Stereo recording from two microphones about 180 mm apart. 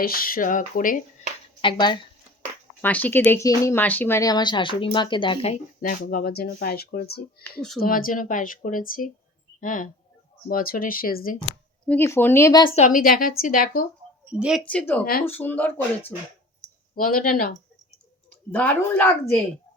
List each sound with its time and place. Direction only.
0.0 s speech: 55° left (ahead or behind)
1.6 s speech: 25° left (ahead or behind)
2.8 s speech: 10° left (ahead or behind); by 5.5 s 30° left (ahead or behind)
6.0 s speech: 55° left (ahead or behind)
11.9 s speech: 15° left (ahead or behind)
12.7 s speech: 45° left (ahead or behind)
14.3 s speech: 5° right (ahead or behind)
14.6 s speech: 5° left (ahead or behind)
16.9 s speech: 50° left (ahead or behind)
18.3 s speech: 10° left (ahead or behind)